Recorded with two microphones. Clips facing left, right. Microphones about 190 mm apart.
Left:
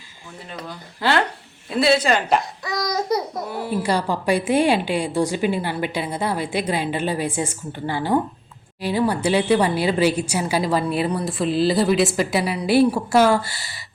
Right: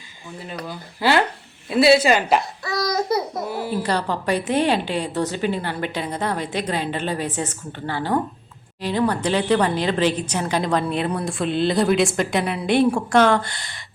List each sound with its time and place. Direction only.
0.7 s a woman's voice: 5° right (ahead or behind)
2.6 s babbling: 15° left (ahead or behind)
3.1 s speech: 5° right (ahead or behind)
3.8 s a woman's voice: 10° left (ahead or behind)